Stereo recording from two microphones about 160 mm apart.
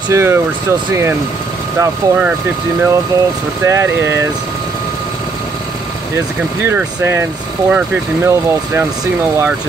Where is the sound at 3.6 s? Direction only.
15° right (ahead or behind).